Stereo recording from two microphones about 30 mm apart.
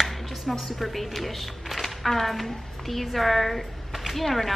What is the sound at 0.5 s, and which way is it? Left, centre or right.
A woman's voice, centre.